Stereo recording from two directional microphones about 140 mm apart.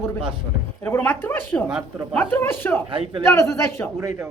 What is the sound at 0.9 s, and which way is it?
A man's voice, 15° left (ahead or behind).